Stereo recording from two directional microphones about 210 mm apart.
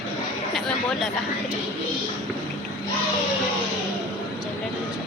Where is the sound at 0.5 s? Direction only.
Centre (ahead or behind).